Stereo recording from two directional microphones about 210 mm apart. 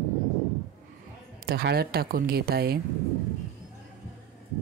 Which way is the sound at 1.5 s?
50° right (ahead or behind).